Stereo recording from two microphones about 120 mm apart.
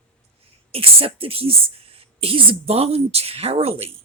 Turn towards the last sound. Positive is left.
turn(degrees=-60)  # may be behind; listen again after turning